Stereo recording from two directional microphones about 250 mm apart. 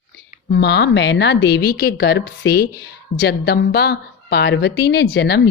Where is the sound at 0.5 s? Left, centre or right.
Left.